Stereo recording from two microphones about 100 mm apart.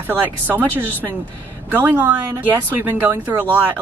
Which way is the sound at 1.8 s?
15° right (ahead or behind).